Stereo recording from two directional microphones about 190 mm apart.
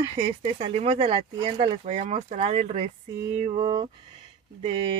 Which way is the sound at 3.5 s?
25° right (ahead or behind).